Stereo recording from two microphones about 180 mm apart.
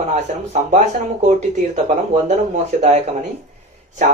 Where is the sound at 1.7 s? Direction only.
40° right (ahead or behind).